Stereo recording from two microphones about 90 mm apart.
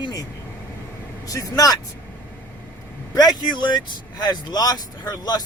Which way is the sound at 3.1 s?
50° left (ahead or behind).